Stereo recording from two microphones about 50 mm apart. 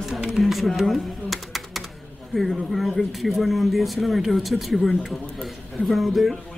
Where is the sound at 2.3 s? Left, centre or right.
Centre.